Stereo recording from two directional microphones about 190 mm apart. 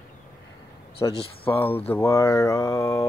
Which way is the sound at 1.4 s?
10° left (ahead or behind).